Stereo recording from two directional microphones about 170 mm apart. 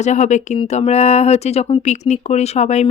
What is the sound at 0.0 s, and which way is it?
Speech, 45° left (ahead or behind).